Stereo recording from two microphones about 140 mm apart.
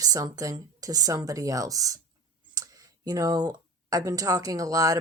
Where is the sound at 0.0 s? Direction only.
25° right (ahead or behind).